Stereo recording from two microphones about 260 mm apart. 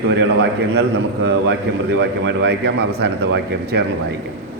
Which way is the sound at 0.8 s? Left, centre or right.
Right.